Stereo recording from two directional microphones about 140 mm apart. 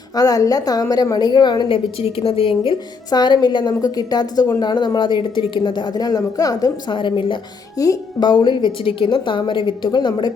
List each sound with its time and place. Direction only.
0.2 s a woman's voice: 25° left (ahead or behind)